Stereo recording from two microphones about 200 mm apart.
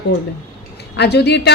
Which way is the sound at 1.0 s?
55° left (ahead or behind).